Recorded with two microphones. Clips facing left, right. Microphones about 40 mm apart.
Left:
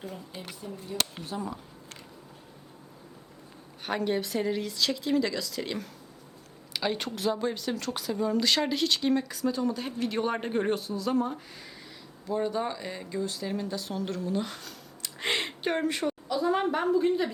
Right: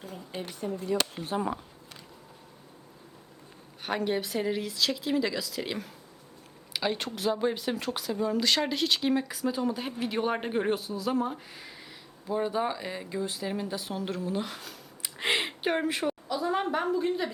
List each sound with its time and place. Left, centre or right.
0.6 s speech: right
1.3 s speech: right
3.8 s a woman's voice: centre
7.9 s speech: centre